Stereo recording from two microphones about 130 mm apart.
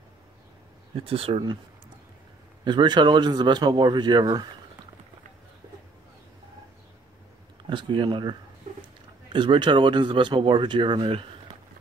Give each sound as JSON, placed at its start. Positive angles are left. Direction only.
{"t": 0.9, "sound": "speech", "side_deg": -45}
{"t": 2.6, "sound": "speech", "side_deg": -35}
{"t": 7.7, "sound": "speech", "side_deg": -40}